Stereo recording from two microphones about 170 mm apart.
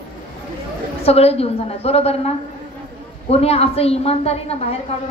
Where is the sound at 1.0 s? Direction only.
35° left (ahead or behind).